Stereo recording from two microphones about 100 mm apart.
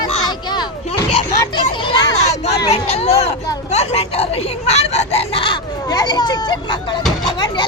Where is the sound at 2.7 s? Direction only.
90° left; by 5.6 s 60° left (ahead or behind).